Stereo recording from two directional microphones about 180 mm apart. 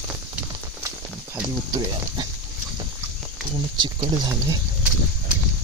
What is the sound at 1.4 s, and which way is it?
Speech, 20° right (ahead or behind).